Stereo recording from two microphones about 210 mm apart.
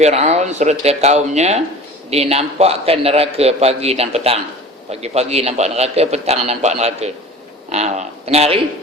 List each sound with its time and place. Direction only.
0.0 s a man's voice: 30° right (ahead or behind)